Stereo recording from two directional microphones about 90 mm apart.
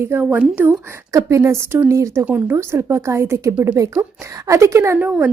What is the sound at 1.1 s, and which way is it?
Speech, 35° right (ahead or behind).